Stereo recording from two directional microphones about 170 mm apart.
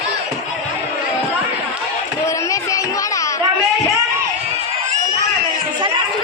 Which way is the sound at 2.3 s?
20° left (ahead or behind).